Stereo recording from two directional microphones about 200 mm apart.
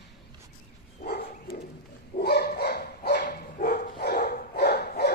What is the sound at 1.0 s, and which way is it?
Dog, 50° left (ahead or behind).